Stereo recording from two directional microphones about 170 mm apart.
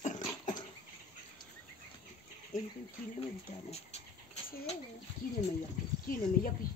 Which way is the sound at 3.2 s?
35° left (ahead or behind).